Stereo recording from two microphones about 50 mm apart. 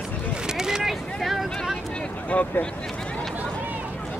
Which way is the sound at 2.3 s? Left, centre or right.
Left.